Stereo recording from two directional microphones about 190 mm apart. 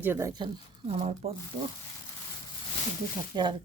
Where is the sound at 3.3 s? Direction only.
25° right (ahead or behind).